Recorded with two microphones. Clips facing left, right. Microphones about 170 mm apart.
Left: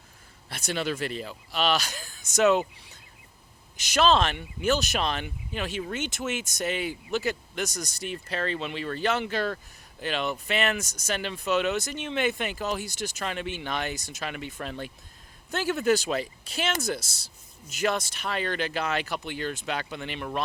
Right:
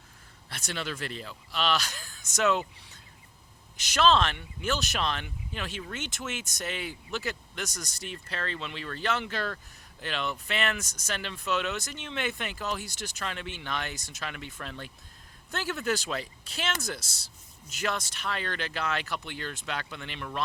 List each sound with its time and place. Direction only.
0.5 s speech: 10° left (ahead or behind)
3.9 s speech: 10° left (ahead or behind)
7.7 s speech: 40° left (ahead or behind)
8.0 s speech: 10° left (ahead or behind)
18.2 s speech: 10° left (ahead or behind)